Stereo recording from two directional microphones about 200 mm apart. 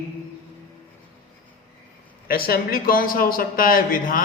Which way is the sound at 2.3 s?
50° left (ahead or behind).